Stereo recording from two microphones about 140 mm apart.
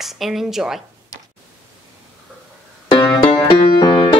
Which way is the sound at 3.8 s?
30° left (ahead or behind).